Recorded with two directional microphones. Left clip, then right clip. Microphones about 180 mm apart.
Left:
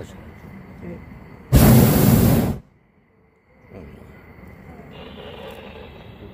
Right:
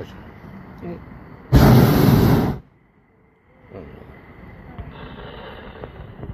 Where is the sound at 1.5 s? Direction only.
20° left (ahead or behind).